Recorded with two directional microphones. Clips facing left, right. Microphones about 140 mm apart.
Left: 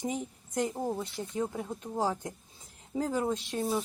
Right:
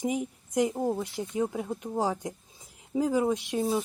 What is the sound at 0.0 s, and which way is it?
A woman's voice, 10° right (ahead or behind).